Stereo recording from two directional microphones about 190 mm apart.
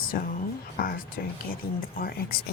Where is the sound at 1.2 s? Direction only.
55° left (ahead or behind).